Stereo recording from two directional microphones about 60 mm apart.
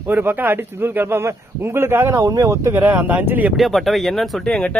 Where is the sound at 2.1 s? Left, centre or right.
Right.